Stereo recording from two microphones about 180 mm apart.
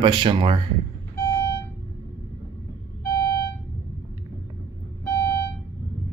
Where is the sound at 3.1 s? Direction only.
25° left (ahead or behind).